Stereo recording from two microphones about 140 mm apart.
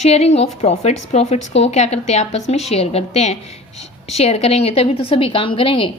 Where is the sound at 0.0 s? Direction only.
50° left (ahead or behind).